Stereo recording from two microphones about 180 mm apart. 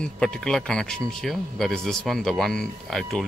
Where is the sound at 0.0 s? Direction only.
5° left (ahead or behind).